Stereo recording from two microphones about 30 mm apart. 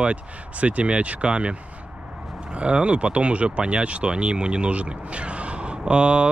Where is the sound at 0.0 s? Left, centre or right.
Right.